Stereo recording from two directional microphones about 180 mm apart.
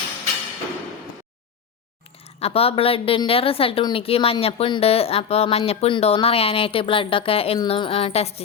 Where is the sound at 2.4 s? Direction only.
35° left (ahead or behind).